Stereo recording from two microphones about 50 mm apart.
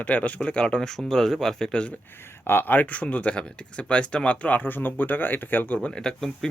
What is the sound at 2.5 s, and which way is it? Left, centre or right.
Speech, left.